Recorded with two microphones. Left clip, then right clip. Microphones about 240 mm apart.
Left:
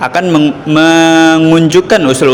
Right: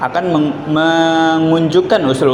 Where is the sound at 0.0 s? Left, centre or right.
Left.